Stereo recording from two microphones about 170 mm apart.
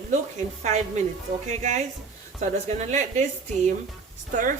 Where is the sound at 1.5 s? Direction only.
45° right (ahead or behind).